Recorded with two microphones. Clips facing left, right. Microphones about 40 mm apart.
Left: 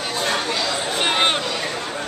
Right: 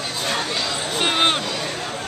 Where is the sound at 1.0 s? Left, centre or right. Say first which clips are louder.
Right 1 dB; centre.